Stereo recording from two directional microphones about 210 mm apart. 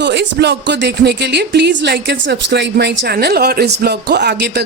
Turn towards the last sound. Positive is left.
turn(degrees=-50)  # may be behind; listen again after turning